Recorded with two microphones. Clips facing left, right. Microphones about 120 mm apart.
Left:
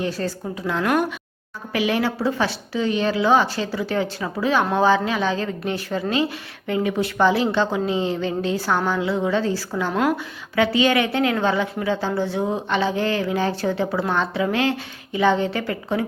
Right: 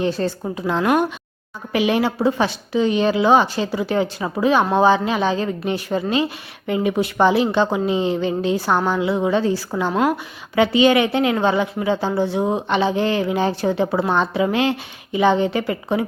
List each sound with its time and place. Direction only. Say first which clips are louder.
0.0 s a woman's voice: right 4 dB; 25° right (ahead or behind)
9.9 s a woman's voice: right 2 dB; 5° right (ahead or behind)
10.5 s a woman's voice: right 4 dB; 20° right (ahead or behind)